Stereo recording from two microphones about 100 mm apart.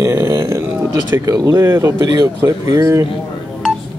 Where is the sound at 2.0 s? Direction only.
45° right (ahead or behind).